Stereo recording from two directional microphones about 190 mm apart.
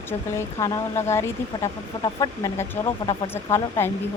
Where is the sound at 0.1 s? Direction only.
15° left (ahead or behind).